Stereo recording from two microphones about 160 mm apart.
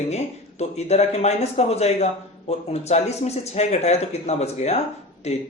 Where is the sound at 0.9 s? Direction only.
45° left (ahead or behind).